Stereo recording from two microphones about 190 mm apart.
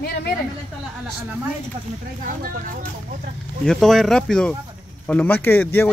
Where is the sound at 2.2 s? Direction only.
45° right (ahead or behind).